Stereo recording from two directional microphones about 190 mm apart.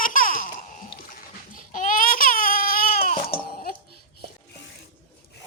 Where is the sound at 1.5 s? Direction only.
45° left (ahead or behind).